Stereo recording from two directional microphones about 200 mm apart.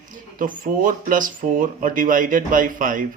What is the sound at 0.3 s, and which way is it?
Speech, 40° right (ahead or behind).